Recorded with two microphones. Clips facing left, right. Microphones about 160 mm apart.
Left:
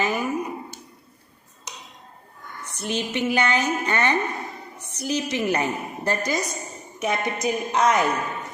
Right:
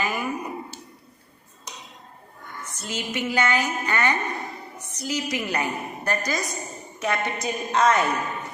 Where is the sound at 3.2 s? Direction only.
20° left (ahead or behind).